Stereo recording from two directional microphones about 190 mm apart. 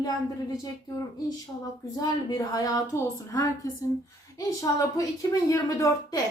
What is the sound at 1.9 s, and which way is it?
A woman's voice, 20° left (ahead or behind).